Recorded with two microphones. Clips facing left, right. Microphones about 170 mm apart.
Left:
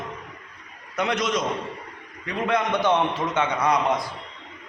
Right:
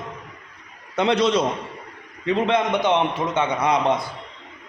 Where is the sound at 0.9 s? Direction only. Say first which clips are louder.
Right 6 dB; 30° right (ahead or behind).